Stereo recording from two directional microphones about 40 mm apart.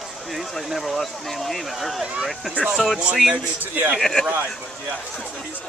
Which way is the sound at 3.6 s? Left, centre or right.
Right.